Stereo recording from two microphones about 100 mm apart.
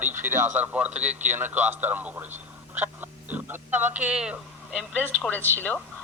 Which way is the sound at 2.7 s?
20° right (ahead or behind).